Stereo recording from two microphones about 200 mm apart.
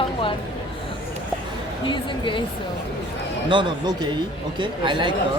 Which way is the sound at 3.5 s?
25° right (ahead or behind).